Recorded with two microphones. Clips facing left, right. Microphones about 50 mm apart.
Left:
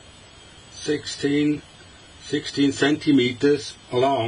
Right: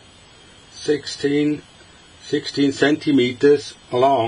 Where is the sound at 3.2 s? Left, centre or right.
Right.